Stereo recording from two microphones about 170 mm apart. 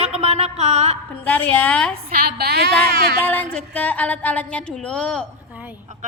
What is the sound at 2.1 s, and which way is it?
Speech, 65° right (ahead or behind).